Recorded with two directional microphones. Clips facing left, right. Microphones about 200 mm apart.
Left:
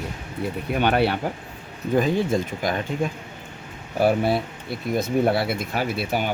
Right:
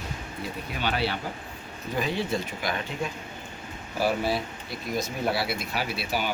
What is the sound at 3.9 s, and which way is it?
Speech, 55° left (ahead or behind).